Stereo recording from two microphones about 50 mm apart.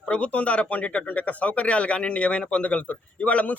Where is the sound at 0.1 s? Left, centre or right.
Left.